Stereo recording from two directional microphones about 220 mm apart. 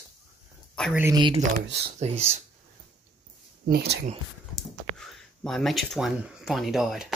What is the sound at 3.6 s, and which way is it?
Speech, 45° right (ahead or behind).